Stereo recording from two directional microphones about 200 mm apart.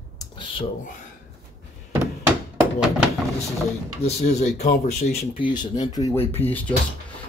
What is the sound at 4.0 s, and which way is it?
Speech, 35° left (ahead or behind).